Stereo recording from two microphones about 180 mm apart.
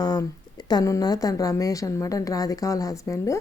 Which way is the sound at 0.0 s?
20° left (ahead or behind).